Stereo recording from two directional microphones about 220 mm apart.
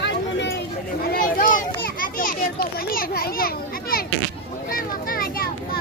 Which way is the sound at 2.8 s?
40° left (ahead or behind).